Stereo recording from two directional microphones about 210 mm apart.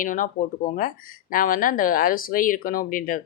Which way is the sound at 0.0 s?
40° left (ahead or behind).